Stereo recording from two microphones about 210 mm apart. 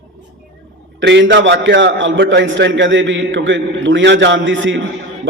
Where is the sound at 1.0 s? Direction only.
55° right (ahead or behind).